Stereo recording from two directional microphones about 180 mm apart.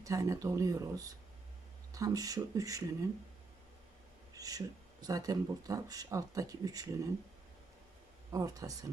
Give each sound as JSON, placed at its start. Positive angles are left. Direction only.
{"t": 0.0, "sound": "speech", "side_deg": -20}
{"t": 4.4, "sound": "speech", "side_deg": -20}
{"t": 8.3, "sound": "speech", "side_deg": -20}